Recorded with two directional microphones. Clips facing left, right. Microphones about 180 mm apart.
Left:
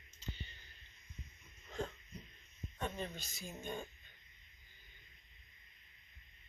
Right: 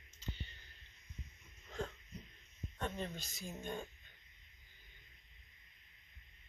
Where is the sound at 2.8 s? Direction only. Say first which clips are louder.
Even; 10° left (ahead or behind).